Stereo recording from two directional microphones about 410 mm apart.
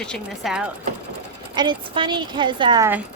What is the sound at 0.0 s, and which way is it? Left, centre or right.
A woman's voice, centre.